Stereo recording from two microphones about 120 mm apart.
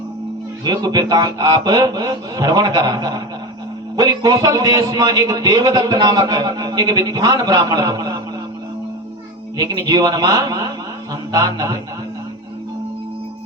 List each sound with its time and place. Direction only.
0.6 s a man's voice: 35° right (ahead or behind)
9.6 s a man's voice: 30° right (ahead or behind)